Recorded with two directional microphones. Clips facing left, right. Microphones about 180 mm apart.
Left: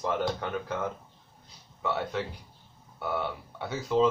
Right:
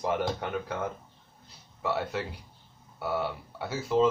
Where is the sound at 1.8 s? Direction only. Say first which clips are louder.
Even; 5° right (ahead or behind).